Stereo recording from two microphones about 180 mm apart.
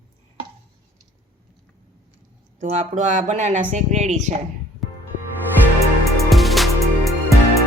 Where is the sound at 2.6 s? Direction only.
40° right (ahead or behind).